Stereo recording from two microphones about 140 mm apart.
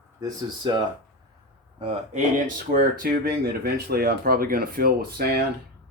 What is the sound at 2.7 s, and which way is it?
Speech, 90° right.